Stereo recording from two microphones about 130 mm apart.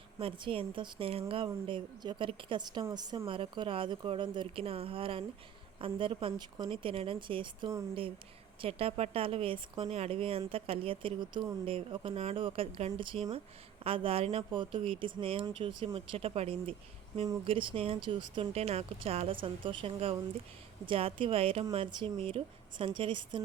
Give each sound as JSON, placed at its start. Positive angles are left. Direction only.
{"t": 0.2, "sound": "a woman's voice", "side_deg": -40}
{"t": 3.2, "sound": "a woman's voice", "side_deg": -45}
{"t": 19.3, "sound": "a woman's voice", "side_deg": -40}